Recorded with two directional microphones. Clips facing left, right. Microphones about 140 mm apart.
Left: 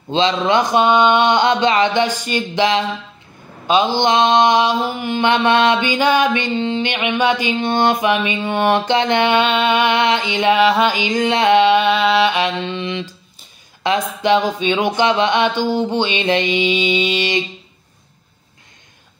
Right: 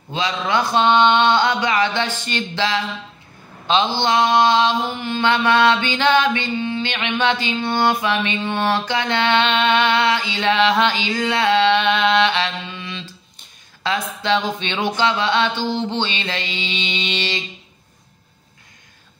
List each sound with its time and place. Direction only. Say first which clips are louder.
0.1 s mantra: left 6 dB; 25° left (ahead or behind)